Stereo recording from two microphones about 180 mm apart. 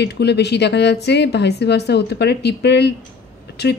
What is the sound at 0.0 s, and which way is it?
Speech, 70° left (ahead or behind).